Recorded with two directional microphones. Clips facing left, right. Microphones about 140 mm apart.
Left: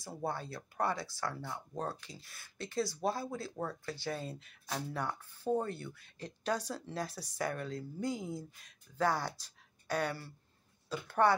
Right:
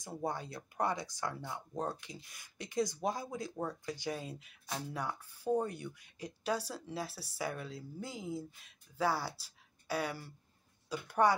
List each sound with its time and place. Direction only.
0.0 s speech: 15° right (ahead or behind)